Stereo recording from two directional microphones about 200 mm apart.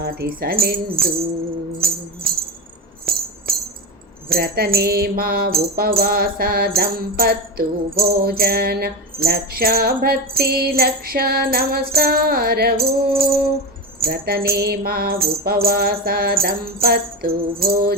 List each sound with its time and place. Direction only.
0.0 s mantra: 50° right (ahead or behind)
3.1 s music: 50° right (ahead or behind)
3.5 s tambourine: 50° right (ahead or behind)
4.3 s mantra: 50° right (ahead or behind)